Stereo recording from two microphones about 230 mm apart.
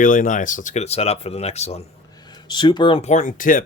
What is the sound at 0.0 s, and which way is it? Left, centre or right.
Speech, left.